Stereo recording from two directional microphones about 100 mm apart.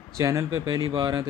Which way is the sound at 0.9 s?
55° right (ahead or behind).